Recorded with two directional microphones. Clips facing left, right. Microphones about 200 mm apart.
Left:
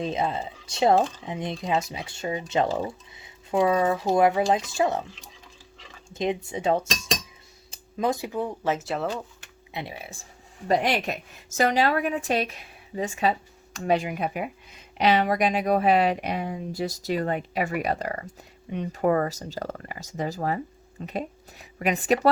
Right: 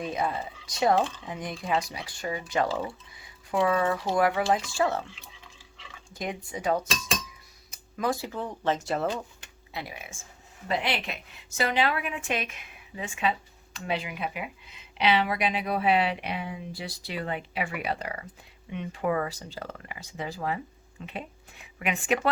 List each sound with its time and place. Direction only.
0.0 s speech: 25° left (ahead or behind)
5.1 s stir: 40° left (ahead or behind)
6.1 s speech: 25° left (ahead or behind); by 9.0 s centre (ahead or behind)
9.0 s speech: 15° right (ahead or behind)
9.7 s speech: 30° left (ahead or behind)
10.7 s a woman's voice: 45° left (ahead or behind)